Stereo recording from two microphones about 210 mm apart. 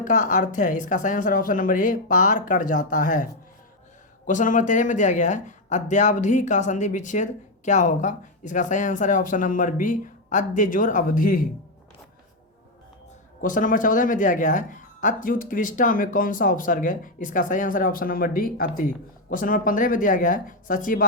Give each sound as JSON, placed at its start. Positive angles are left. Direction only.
{"t": 0.0, "sound": "speech", "side_deg": 35}
{"t": 4.3, "sound": "speech", "side_deg": 35}
{"t": 13.4, "sound": "speech", "side_deg": 40}